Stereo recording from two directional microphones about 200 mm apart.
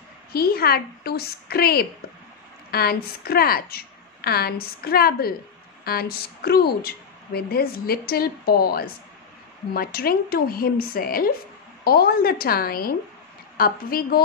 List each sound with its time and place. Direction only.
0.3 s a woman's voice: 50° left (ahead or behind)